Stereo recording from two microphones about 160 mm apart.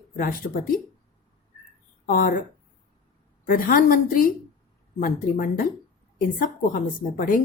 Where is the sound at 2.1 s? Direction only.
60° left (ahead or behind).